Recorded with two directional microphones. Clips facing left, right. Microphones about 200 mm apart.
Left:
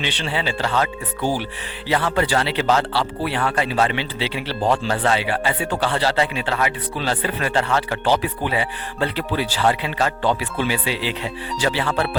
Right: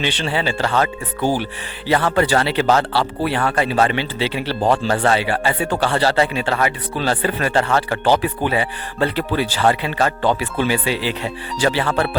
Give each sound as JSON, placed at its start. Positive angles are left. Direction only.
{"t": 0.0, "sound": "speech", "side_deg": -45}